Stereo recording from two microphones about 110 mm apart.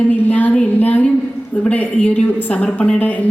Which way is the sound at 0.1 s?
15° left (ahead or behind).